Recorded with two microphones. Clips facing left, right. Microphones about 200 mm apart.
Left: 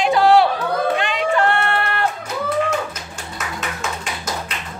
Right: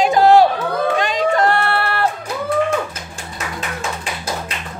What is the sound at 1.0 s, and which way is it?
Music, 40° right (ahead or behind).